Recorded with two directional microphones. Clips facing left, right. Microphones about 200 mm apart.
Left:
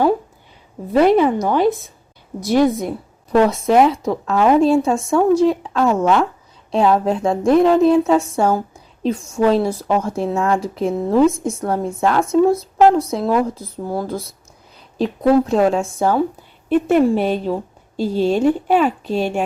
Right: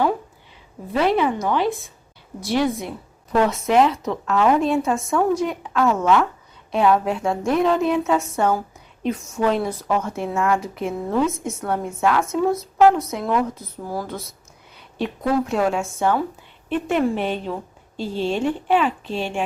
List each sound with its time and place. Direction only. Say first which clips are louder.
0.9 s a woman's voice: left 6 dB; 40° left (ahead or behind)